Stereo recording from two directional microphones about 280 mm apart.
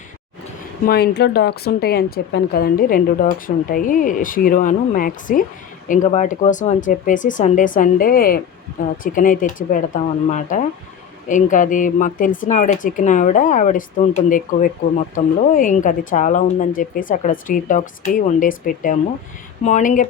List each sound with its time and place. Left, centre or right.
0.9 s speech: left